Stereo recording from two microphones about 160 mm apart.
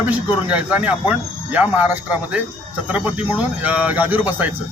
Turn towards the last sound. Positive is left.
turn(degrees=-10)  # may be behind; listen again after turning